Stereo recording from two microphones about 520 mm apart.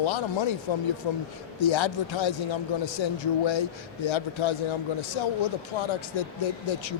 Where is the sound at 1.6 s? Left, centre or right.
Left.